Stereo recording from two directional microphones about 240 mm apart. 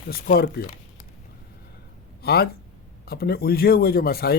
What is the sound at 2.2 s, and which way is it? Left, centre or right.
Speech, left.